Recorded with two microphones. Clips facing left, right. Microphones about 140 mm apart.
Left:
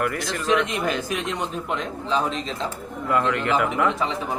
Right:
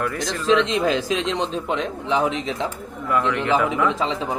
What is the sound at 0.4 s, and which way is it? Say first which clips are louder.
A man's voice: right 4 dB; 90° right.